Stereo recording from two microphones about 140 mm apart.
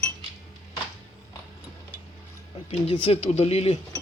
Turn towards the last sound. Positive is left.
turn(degrees=50)  # may be behind; listen again after turning